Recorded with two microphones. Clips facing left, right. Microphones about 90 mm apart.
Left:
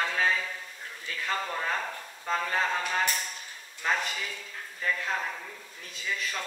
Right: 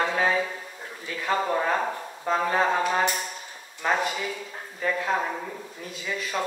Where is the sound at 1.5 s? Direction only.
30° right (ahead or behind).